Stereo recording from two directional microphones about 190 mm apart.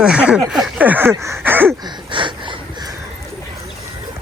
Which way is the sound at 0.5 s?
5° right (ahead or behind).